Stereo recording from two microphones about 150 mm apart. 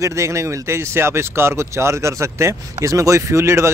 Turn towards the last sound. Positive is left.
turn(degrees=-20)  # may be behind; listen again after turning